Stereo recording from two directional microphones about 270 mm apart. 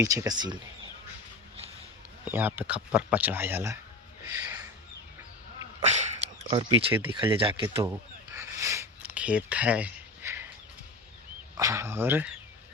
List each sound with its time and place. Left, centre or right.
0.0 s speech: centre
2.2 s speech: centre
5.8 s speech: right
6.9 s speech: centre
7.3 s a sound: centre
11.5 s speech: centre